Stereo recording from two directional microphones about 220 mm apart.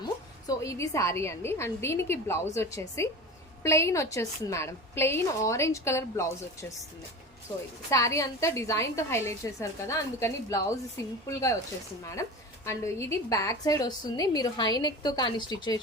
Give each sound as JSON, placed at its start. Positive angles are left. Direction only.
{"t": 0.0, "sound": "a woman's voice", "side_deg": 15}